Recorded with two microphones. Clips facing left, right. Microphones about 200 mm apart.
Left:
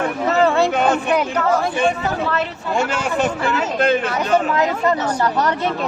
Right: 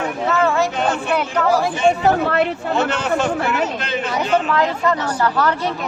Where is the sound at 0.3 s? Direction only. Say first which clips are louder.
Left 2 dB; 35° left (ahead or behind).